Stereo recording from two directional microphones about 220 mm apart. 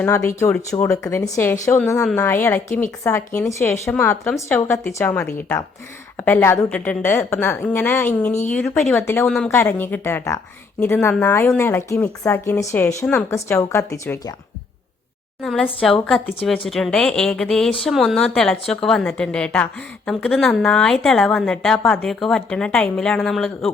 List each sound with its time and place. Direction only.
0.0 s speech: 10° left (ahead or behind)
8.3 s speech: 30° left (ahead or behind)
8.5 s speech: 5° left (ahead or behind)
15.4 s a woman's voice: 5° left (ahead or behind)